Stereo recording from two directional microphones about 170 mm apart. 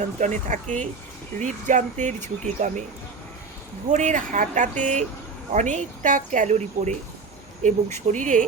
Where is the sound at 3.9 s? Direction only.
45° right (ahead or behind).